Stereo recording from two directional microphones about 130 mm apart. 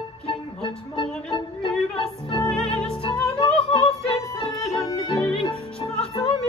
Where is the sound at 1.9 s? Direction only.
45° left (ahead or behind).